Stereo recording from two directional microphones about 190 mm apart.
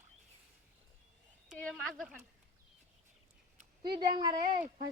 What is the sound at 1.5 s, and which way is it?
Speech, 5° left (ahead or behind).